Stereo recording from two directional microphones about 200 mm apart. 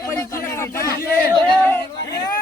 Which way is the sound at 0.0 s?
15° left (ahead or behind).